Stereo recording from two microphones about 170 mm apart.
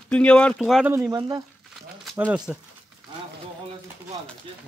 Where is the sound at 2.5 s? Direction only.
Centre (ahead or behind).